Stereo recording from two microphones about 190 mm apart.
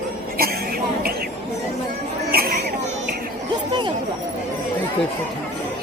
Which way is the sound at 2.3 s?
55° right (ahead or behind).